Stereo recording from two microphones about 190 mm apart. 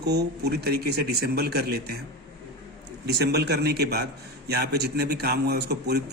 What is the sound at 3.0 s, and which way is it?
Speech, 60° right (ahead or behind).